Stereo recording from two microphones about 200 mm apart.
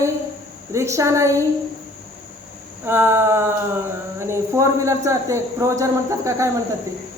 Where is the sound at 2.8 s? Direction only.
10° right (ahead or behind).